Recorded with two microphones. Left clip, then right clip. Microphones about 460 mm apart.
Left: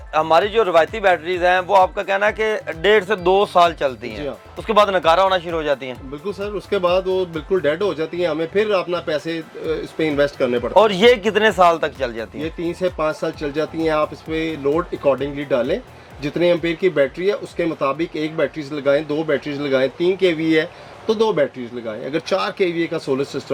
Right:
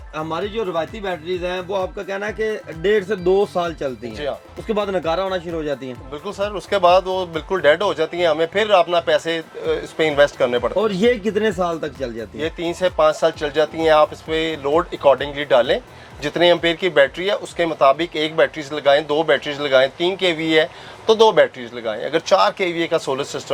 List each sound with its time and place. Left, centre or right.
0.1 s a man's voice: left
1.8 s speech: left
6.4 s speech: right
10.8 s speech: left
12.4 s speech: right